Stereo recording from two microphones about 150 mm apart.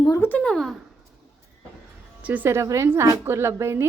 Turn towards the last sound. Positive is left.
turn(degrees=-20)  # may be behind; listen again after turning